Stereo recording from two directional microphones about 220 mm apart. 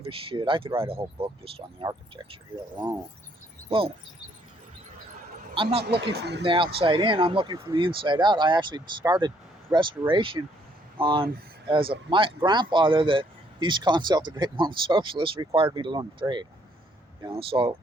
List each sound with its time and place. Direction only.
0.0 s speech: 25° right (ahead or behind)
5.6 s speech: 25° right (ahead or behind)
6.0 s speech: 50° right (ahead or behind)
6.4 s speech: 25° right (ahead or behind)
17.5 s speech: 25° right (ahead or behind)